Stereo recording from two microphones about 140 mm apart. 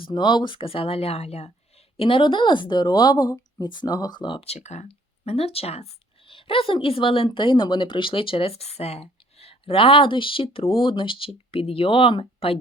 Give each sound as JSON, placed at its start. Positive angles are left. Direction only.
{"t": 0.0, "sound": "a woman's voice", "side_deg": 30}